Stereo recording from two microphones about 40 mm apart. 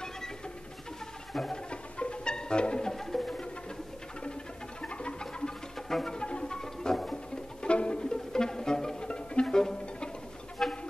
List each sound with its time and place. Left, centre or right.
1.5 s music: left
2.9 s music: centre
4.8 s music: left
5.9 s music: centre
6.1 s music: left
7.6 s music: left
9.1 s bowed string instrument: left
9.6 s music: centre